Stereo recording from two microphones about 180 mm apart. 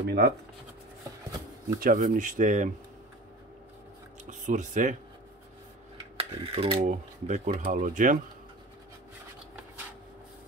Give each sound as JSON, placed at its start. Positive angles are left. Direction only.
{"t": 0.0, "sound": "speech", "side_deg": -65}
{"t": 1.8, "sound": "speech", "side_deg": -50}
{"t": 4.3, "sound": "speech", "side_deg": -45}
{"t": 6.1, "sound": "mechanisms", "side_deg": -30}
{"t": 6.8, "sound": "speech", "side_deg": -45}